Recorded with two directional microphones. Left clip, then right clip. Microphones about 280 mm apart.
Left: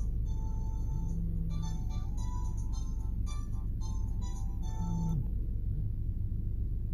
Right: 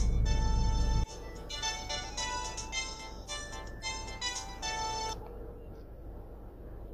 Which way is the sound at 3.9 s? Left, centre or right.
Right.